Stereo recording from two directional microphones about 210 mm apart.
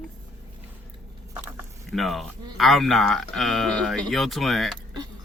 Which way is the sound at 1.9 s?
Centre (ahead or behind).